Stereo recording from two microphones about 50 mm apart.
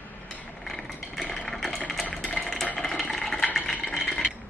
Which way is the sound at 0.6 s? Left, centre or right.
Centre.